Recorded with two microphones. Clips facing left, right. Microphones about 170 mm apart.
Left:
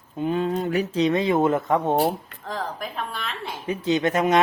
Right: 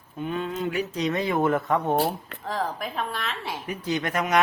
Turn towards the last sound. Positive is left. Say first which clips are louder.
# left 5 dB
turn(degrees=25)  # may be behind; listen again after turning